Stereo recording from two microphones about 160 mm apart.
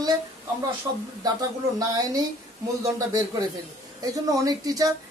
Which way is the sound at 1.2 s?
25° right (ahead or behind).